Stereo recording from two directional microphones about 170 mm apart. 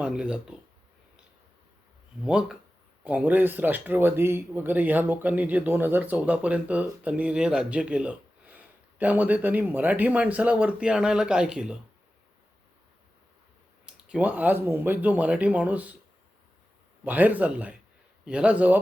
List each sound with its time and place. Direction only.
0.0 s speech: 5° right (ahead or behind)
2.2 s speech: 5° right (ahead or behind)
13.8 s speech: 5° right (ahead or behind)
17.0 s speech: 10° right (ahead or behind)